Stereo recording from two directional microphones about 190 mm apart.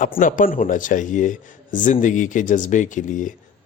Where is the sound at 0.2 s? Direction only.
45° left (ahead or behind).